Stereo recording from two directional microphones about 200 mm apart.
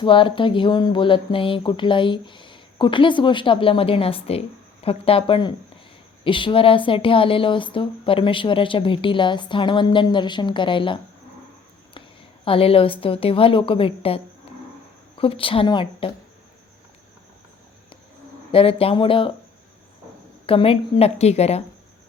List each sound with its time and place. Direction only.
0.0 s speech: 25° left (ahead or behind)
12.5 s speech: 30° left (ahead or behind)
15.2 s speech: 25° left (ahead or behind)
18.5 s speech: 30° left (ahead or behind)
20.5 s a woman's voice: 30° left (ahead or behind)